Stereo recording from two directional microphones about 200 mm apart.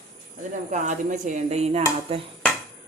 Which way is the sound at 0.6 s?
40° right (ahead or behind).